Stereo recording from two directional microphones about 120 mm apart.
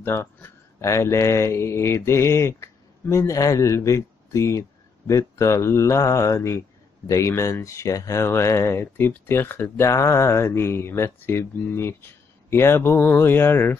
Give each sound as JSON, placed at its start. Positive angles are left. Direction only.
{"t": 0.0, "sound": "speech", "side_deg": 20}